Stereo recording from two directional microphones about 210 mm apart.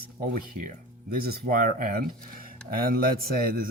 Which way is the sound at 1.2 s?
40° right (ahead or behind).